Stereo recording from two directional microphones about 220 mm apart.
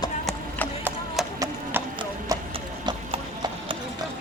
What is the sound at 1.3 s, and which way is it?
Clip-clop, 15° right (ahead or behind).